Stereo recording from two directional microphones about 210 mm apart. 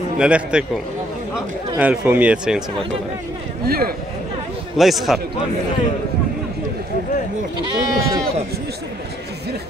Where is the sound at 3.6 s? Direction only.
45° right (ahead or behind).